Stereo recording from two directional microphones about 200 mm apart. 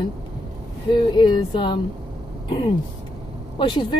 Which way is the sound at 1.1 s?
25° left (ahead or behind).